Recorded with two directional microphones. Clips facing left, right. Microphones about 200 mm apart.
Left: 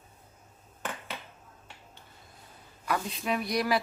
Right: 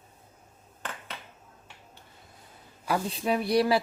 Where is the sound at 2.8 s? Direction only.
30° right (ahead or behind).